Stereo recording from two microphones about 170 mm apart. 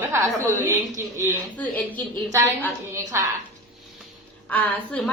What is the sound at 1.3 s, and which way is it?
Speech, 10° left (ahead or behind).